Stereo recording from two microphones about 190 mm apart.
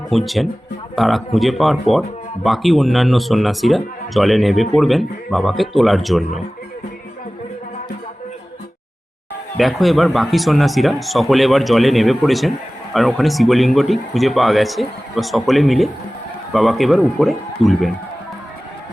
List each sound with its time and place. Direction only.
0.1 s speech: centre (ahead or behind)
9.6 s speech: centre (ahead or behind)